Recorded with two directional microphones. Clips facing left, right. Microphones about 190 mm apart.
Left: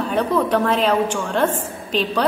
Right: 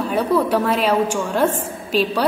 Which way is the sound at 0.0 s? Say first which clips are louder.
Right 1 dB; 10° right (ahead or behind).